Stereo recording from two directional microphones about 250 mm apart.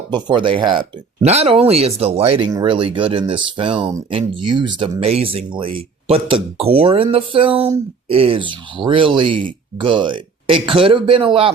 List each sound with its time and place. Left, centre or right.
0.1 s speech: centre